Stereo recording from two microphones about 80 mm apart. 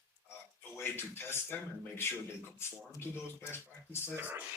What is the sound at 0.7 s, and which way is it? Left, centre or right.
Speech, left.